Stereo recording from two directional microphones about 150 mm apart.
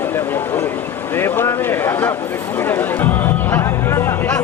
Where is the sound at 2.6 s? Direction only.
15° left (ahead or behind).